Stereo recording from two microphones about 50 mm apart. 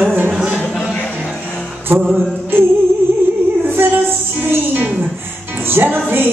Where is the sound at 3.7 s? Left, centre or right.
Right.